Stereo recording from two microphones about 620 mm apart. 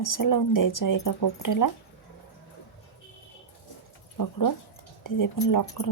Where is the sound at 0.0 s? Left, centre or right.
Left.